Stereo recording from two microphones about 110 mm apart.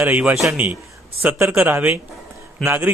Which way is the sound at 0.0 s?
15° right (ahead or behind).